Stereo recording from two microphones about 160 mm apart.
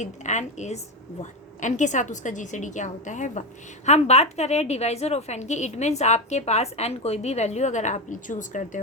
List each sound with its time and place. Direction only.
0.0 s a woman's voice: 45° left (ahead or behind)